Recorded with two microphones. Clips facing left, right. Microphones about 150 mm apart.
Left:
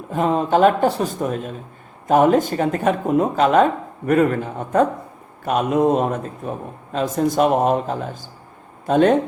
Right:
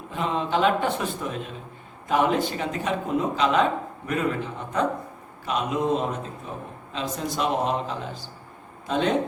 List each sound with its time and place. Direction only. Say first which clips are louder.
0.1 s speech: left 8 dB; 45° left (ahead or behind)